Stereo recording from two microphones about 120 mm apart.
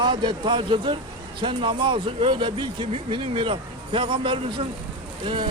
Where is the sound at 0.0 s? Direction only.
40° right (ahead or behind).